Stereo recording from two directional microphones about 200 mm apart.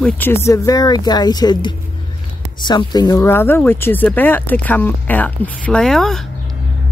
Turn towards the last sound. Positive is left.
turn(degrees=0)  # may be behind; listen again after turning